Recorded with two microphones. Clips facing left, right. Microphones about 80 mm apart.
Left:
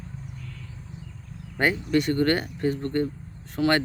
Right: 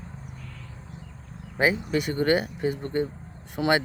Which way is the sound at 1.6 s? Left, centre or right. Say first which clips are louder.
Left 1 dB; centre.